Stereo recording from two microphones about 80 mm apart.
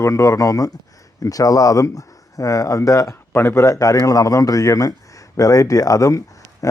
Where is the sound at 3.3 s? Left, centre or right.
Left.